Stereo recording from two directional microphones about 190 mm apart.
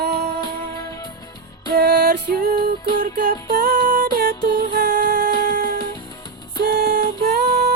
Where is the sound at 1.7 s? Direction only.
55° right (ahead or behind).